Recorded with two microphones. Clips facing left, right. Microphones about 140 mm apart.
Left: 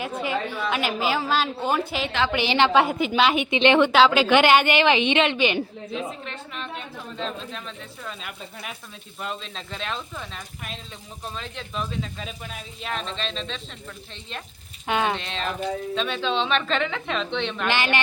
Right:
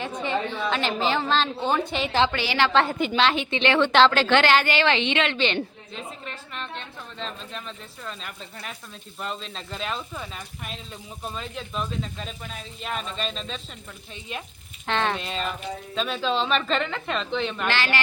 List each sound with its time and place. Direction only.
0.0 s a woman's voice: 5° left (ahead or behind)
2.3 s a woman's voice: 20° left (ahead or behind); by 13.6 s 5° right (ahead or behind)
14.8 s speech: 10° left (ahead or behind)
15.1 s a woman's voice: 5° right (ahead or behind)
17.7 s a woman's voice: 20° left (ahead or behind)